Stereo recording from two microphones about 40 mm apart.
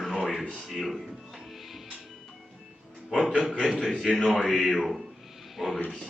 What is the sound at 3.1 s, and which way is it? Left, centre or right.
A man's voice, centre.